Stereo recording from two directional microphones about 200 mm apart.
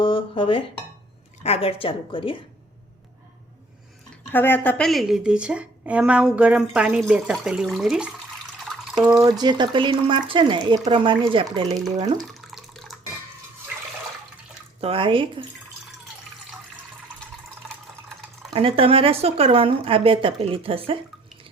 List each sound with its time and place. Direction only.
0.0 s dishes: 25° left (ahead or behind)
1.5 s a woman's voice: 30° left (ahead or behind)
4.3 s a woman's voice: 10° left (ahead or behind)
8.6 s drip: centre (ahead or behind)
9.4 s speech: 20° right (ahead or behind)
12.3 s water: centre (ahead or behind)
14.8 s speech: 30° right (ahead or behind)
18.5 s speech: 25° right (ahead or behind)